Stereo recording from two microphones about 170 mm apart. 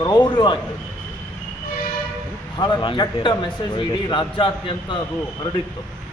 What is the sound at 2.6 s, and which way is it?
Speech, 25° left (ahead or behind).